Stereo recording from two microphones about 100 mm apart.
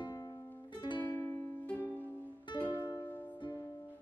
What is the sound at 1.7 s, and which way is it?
Music, 20° right (ahead or behind).